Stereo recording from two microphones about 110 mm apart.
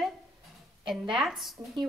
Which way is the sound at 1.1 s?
Centre (ahead or behind).